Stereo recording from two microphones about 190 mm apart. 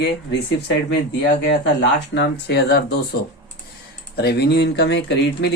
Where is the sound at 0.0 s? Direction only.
65° left (ahead or behind).